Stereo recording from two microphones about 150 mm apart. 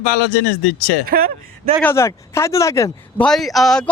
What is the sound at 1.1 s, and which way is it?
Speech, 80° right.